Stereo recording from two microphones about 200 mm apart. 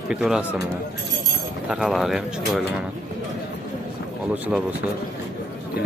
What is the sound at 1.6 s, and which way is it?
Speech, centre (ahead or behind).